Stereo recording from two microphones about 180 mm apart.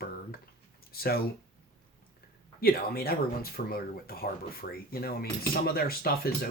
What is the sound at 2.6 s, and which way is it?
Speech, 60° left (ahead or behind).